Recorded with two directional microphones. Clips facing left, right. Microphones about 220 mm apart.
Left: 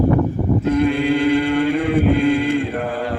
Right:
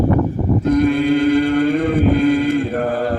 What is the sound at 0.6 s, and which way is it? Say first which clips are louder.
Chant: right 3 dB; 40° right (ahead or behind).